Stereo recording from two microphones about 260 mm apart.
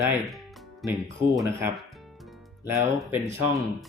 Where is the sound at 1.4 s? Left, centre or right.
Centre.